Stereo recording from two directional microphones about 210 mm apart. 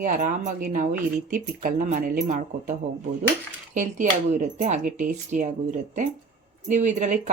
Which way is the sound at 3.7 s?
35° right (ahead or behind).